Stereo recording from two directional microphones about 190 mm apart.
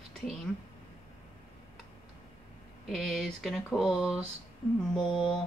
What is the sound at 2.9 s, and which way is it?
A man's voice, centre (ahead or behind).